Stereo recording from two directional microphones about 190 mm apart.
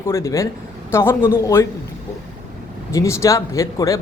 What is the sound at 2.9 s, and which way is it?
A man's voice, 15° left (ahead or behind).